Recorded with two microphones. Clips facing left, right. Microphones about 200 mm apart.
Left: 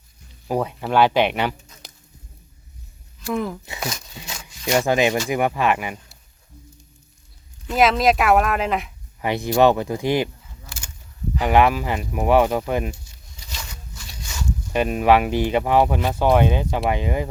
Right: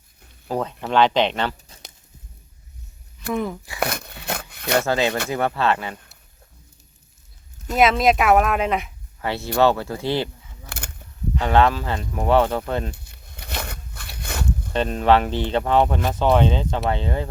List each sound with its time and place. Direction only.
0.4 s speech: 10° left (ahead or behind)
3.3 s speech: centre (ahead or behind)
3.8 s speech: 60° right (ahead or behind)
4.9 s speech: 15° left (ahead or behind)
7.8 s speech: centre (ahead or behind)
9.2 s speech: 15° left (ahead or behind)
10.7 s a sound: 60° right (ahead or behind)
11.3 s speech: 10° left (ahead or behind)
12.9 s a sound: 60° right (ahead or behind)
14.7 s speech: 10° left (ahead or behind)